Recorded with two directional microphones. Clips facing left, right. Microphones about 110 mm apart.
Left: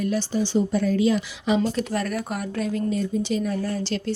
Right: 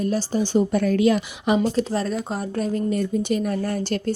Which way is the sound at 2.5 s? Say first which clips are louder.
Right 2 dB; 40° right (ahead or behind).